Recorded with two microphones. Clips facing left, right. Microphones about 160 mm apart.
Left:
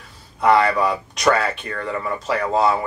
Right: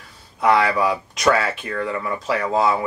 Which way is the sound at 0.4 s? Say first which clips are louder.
Left 1 dB; centre (ahead or behind).